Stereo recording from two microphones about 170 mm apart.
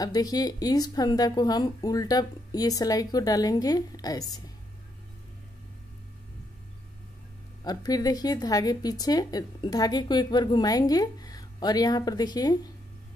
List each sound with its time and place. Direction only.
0.0 s speech: 20° left (ahead or behind)
7.6 s speech: 20° left (ahead or behind)